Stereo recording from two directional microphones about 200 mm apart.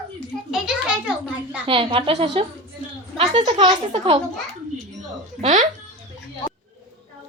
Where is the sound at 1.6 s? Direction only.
25° right (ahead or behind).